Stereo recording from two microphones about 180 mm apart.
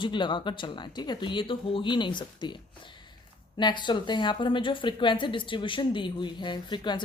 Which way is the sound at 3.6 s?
25° left (ahead or behind).